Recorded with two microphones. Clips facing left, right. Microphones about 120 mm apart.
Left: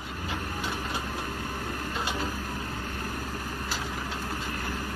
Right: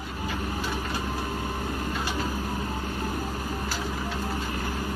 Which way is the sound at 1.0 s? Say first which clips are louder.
Right 4 dB; 15° right (ahead or behind).